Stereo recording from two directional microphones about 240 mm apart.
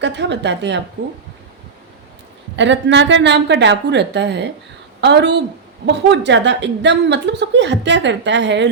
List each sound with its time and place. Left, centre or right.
0.0 s a woman's voice: right
2.6 s a woman's voice: right